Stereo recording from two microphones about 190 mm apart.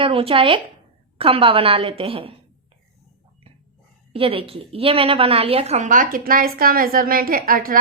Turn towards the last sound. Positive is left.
turn(degrees=-50)  # may be behind; listen again after turning